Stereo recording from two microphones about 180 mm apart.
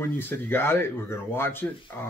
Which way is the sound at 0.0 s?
10° left (ahead or behind).